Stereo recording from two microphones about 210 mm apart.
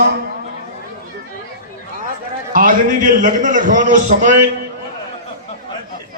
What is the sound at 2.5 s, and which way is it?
A man's voice, 40° right (ahead or behind).